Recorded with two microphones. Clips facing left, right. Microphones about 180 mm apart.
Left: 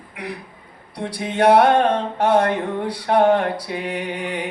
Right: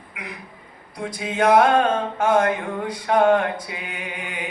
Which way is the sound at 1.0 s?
30° left (ahead or behind).